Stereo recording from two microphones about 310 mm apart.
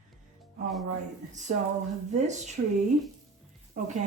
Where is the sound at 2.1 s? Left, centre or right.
Right.